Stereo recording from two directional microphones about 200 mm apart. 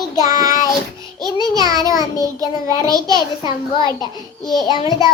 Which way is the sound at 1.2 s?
20° right (ahead or behind).